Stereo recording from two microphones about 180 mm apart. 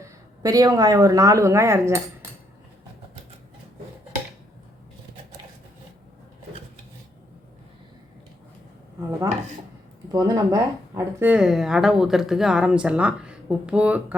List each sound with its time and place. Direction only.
0.0 s speech: 20° right (ahead or behind)
10.1 s speech: 20° right (ahead or behind)